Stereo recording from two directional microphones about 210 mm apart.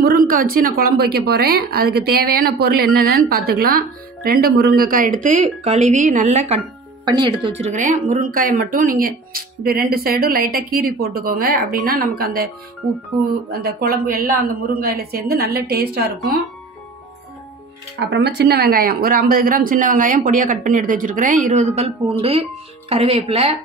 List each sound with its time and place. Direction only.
0.0 s speech: 45° right (ahead or behind)
7.1 s speech: 20° right (ahead or behind)
7.6 s speech: 35° right (ahead or behind)
13.5 s speech: 45° right (ahead or behind)
17.9 s speech: 55° right (ahead or behind); by 23.5 s 30° right (ahead or behind)